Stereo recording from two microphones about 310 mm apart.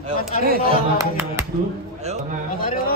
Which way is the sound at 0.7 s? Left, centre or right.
Centre.